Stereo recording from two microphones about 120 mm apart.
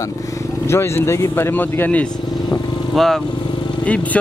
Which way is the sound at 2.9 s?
Centre (ahead or behind).